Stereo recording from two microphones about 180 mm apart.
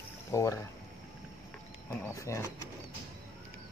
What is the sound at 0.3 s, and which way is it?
Speech, 15° left (ahead or behind).